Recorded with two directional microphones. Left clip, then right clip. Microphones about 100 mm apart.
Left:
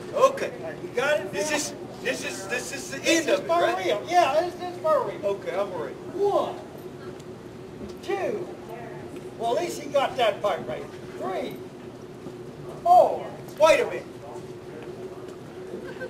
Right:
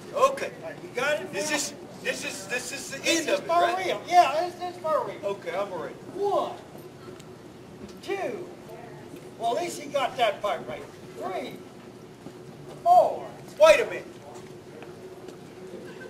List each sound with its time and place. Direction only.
0.1 s a man's voice: 60° right (ahead or behind)
8.1 s a man's voice: 55° right (ahead or behind)
9.4 s a man's voice: 55° right (ahead or behind)
12.8 s a man's voice: 60° right (ahead or behind)